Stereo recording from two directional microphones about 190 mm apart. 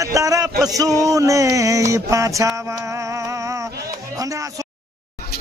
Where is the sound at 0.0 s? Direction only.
15° right (ahead or behind).